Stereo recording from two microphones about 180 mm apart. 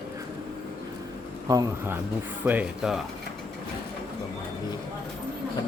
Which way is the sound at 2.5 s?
5° right (ahead or behind).